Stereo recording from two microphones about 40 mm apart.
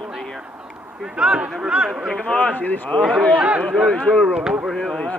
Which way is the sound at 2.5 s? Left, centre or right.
Left.